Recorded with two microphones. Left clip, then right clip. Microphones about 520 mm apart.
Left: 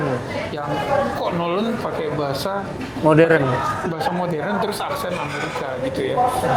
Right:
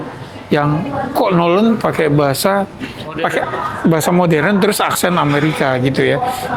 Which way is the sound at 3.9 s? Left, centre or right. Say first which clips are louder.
Right 9 dB; right.